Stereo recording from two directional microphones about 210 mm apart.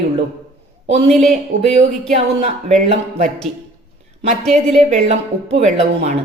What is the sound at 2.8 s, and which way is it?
Speech, 30° right (ahead or behind).